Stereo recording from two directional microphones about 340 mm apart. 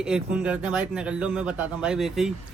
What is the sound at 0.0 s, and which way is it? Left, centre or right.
Speech, centre.